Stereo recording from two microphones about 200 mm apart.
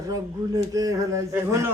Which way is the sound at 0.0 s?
15° right (ahead or behind).